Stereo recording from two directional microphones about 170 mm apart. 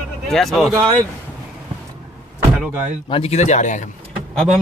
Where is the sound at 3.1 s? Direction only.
35° left (ahead or behind).